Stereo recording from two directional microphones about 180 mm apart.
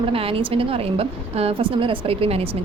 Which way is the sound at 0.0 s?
30° right (ahead or behind).